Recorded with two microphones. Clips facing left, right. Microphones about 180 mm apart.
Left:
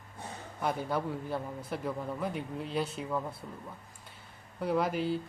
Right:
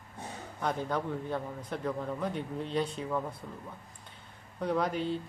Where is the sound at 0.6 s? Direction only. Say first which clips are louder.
Even; 5° left (ahead or behind).